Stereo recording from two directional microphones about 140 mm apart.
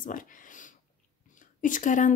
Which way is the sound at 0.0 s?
75° left (ahead or behind).